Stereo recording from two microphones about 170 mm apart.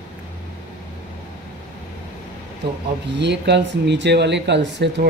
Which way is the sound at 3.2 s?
90° right.